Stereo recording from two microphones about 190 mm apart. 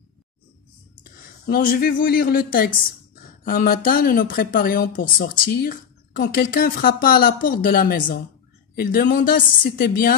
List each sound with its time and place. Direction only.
1.4 s speech: 50° left (ahead or behind)